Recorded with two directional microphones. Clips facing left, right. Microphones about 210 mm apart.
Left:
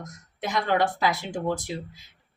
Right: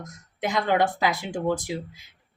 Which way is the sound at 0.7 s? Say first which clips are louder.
Even; 20° right (ahead or behind).